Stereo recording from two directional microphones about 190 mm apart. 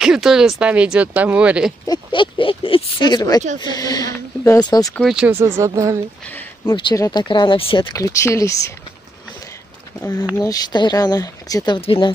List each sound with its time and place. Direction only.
0.0 s speech: centre (ahead or behind)
1.9 s speech: 25° left (ahead or behind)
4.9 s speech: centre (ahead or behind)
6.6 s speech: 25° left (ahead or behind)
10.3 s speech: 20° left (ahead or behind)